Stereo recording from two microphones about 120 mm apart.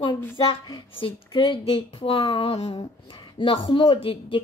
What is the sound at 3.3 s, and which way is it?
A woman's voice, 45° left (ahead or behind).